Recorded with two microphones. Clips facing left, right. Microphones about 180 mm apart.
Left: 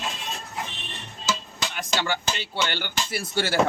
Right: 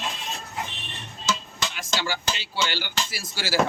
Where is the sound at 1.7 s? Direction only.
60° left (ahead or behind).